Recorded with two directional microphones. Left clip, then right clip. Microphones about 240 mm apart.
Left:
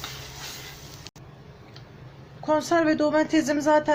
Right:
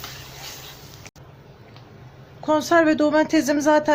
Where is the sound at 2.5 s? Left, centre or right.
Right.